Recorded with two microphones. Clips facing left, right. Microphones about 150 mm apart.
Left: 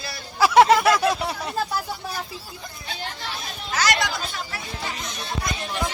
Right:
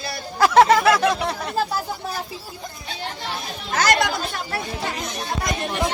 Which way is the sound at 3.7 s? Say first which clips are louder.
Right 4 dB; 50° right (ahead or behind).